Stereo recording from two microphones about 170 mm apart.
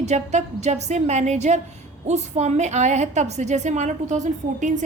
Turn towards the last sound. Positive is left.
turn(degrees=-45)  # may be behind; listen again after turning